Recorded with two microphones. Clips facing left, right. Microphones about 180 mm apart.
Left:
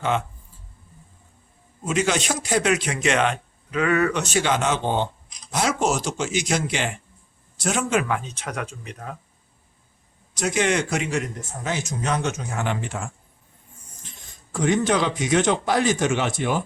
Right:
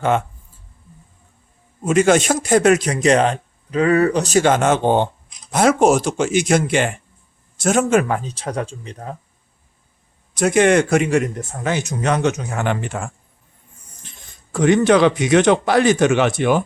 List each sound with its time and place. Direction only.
0.0 s speech: 50° right (ahead or behind)
1.8 s speech: 50° right (ahead or behind); by 9.1 s 30° right (ahead or behind)
10.3 s speech: 55° right (ahead or behind)
11.6 s speech: 65° right (ahead or behind)
14.5 s speech: 65° right (ahead or behind)